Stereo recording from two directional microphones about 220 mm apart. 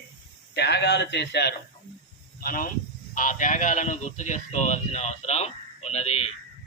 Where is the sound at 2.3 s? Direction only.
40° left (ahead or behind).